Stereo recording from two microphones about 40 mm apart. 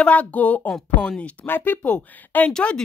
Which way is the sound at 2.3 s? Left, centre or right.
Left.